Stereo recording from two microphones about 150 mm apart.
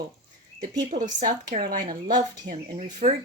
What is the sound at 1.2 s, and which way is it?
Speech, 60° right (ahead or behind).